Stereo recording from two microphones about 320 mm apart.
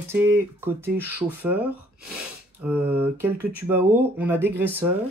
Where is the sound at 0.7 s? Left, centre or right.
Centre.